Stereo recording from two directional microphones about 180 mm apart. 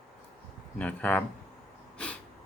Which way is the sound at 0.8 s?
10° left (ahead or behind).